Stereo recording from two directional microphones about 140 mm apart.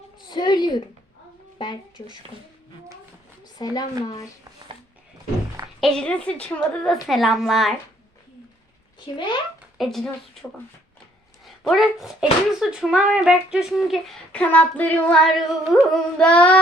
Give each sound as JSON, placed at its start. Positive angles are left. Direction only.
{"t": 0.3, "sound": "a sound", "side_deg": 30}
{"t": 3.6, "sound": "speech", "side_deg": 25}
{"t": 5.8, "sound": "speech", "side_deg": 5}
{"t": 9.1, "sound": "speech", "side_deg": 35}
{"t": 9.7, "sound": "speech", "side_deg": 0}
{"t": 11.4, "sound": "speech", "side_deg": 0}
{"t": 14.4, "sound": "singing", "side_deg": 10}